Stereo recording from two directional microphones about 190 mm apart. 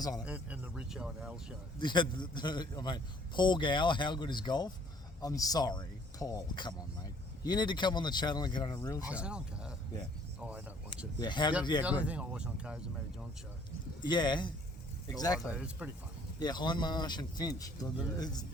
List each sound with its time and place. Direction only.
0.0 s speech: 20° left (ahead or behind)
0.3 s speech: 5° right (ahead or behind)
1.8 s speech: 25° left (ahead or behind)
9.0 s speech: 5° right (ahead or behind)
11.2 s speech: 25° left (ahead or behind)
11.8 s speech: 5° right (ahead or behind)
14.0 s speech: 25° left (ahead or behind)
15.5 s speech: 5° right (ahead or behind)
16.4 s speech: 20° left (ahead or behind)